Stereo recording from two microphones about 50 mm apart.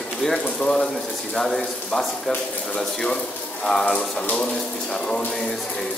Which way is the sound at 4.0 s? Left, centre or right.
Left.